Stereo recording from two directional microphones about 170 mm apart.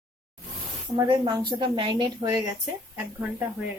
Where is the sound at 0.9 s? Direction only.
25° right (ahead or behind).